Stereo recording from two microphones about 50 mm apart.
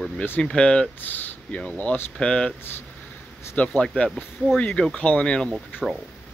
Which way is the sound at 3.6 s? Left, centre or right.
Left.